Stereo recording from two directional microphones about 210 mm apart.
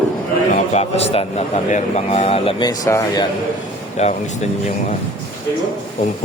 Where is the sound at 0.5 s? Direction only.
30° left (ahead or behind).